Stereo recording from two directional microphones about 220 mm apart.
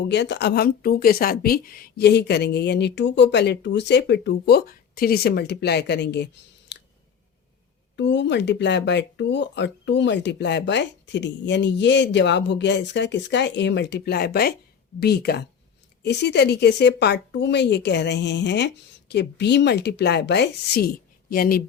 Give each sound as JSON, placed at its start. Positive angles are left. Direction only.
{"t": 0.0, "sound": "speech", "side_deg": 50}
{"t": 6.7, "sound": "a sound", "side_deg": 50}
{"t": 7.9, "sound": "speech", "side_deg": 55}